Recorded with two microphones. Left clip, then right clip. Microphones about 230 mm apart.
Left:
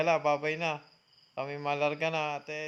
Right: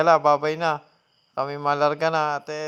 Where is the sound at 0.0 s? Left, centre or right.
Right.